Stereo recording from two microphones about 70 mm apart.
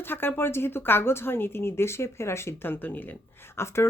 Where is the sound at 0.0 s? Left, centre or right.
Left.